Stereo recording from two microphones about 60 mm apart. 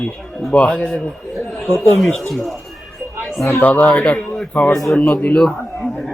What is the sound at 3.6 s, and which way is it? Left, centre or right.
A man's voice, left.